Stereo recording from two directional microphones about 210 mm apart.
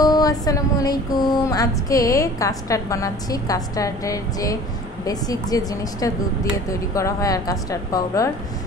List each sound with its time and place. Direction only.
0.0 s music: 20° left (ahead or behind)